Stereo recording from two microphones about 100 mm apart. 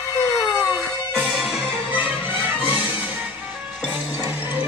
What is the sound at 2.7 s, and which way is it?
Music, 15° right (ahead or behind).